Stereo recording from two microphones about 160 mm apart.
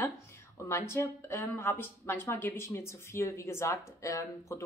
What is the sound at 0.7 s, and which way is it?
Speech, 15° left (ahead or behind).